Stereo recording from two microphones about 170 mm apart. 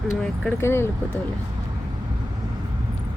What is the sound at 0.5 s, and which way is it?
Speech, 15° left (ahead or behind).